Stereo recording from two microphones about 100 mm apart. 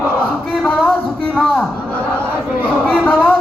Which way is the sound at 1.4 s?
5° left (ahead or behind).